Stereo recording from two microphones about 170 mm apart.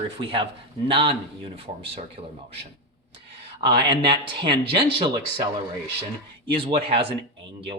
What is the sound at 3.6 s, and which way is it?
Speech, 25° right (ahead or behind).